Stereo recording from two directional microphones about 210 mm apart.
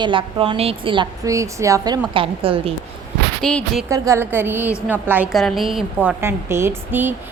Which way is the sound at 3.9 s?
15° right (ahead or behind).